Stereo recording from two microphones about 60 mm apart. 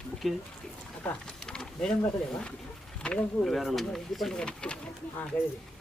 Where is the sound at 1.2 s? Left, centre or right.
Centre.